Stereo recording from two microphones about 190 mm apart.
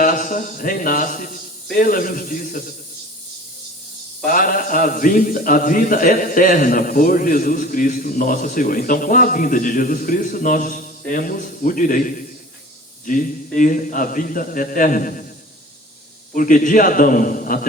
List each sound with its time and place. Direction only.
0.0 s a man's voice: 45° left (ahead or behind)
4.3 s a man's voice: 45° left (ahead or behind)
16.3 s a man's voice: 45° left (ahead or behind)